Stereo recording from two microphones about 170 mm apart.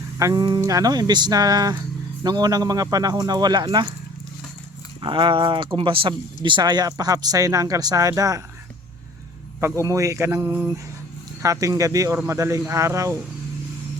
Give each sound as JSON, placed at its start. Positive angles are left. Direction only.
{"t": 0.2, "sound": "speech", "side_deg": -20}
{"t": 4.9, "sound": "speech", "side_deg": -30}
{"t": 9.6, "sound": "speech", "side_deg": -15}